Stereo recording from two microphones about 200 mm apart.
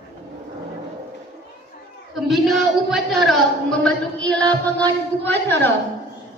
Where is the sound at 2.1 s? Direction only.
Centre (ahead or behind).